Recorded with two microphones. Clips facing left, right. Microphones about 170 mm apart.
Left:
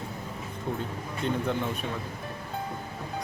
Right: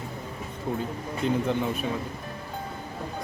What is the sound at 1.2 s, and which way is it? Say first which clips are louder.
Speech: right 4 dB; centre (ahead or behind).